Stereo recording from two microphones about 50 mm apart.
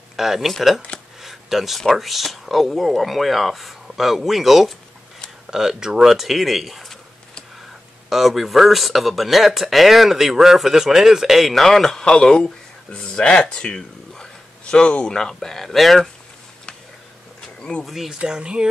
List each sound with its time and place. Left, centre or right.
0.1 s speech: centre
1.2 s a sound: centre
1.8 s speech: centre
8.1 s speech: centre
17.6 s a sound: left
17.8 s speech: centre
18.2 s speech: centre